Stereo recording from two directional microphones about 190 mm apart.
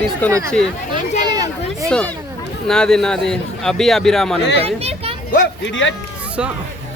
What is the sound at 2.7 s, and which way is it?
Speech, 5° left (ahead or behind).